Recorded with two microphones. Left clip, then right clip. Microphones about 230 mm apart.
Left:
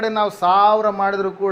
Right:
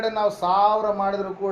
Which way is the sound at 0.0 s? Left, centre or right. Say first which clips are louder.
Left 4 dB; left.